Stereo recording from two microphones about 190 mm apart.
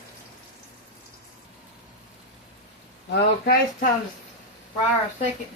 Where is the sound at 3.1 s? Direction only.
50° left (ahead or behind).